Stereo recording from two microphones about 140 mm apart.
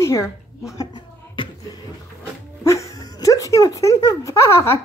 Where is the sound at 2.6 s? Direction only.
20° left (ahead or behind).